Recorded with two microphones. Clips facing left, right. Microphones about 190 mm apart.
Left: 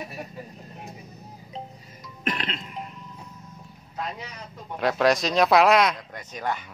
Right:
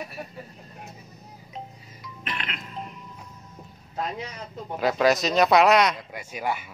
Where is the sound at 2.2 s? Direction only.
35° left (ahead or behind).